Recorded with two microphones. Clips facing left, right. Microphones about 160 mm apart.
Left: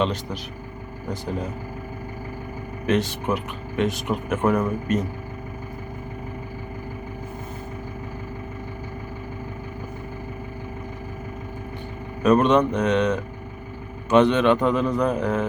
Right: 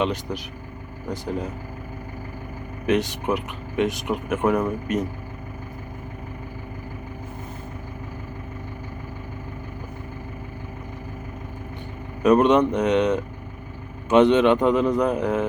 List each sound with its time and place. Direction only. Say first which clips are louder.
1.1 s speech: right 1 dB; 15° right (ahead or behind)
2.8 s speech: right 1 dB; 15° right (ahead or behind)
12.2 s a man's voice: right 1 dB; 20° right (ahead or behind)